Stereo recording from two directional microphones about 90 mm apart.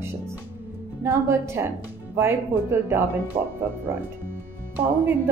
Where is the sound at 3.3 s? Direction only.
75° right (ahead or behind).